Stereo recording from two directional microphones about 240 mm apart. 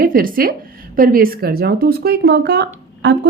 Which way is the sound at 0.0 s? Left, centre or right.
Right.